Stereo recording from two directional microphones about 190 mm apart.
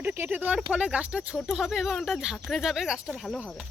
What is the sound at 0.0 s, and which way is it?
Speech, 10° right (ahead or behind).